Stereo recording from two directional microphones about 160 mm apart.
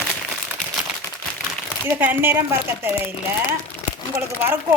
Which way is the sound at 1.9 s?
10° right (ahead or behind).